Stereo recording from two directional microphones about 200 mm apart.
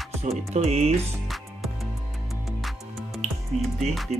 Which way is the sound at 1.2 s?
Centre (ahead or behind).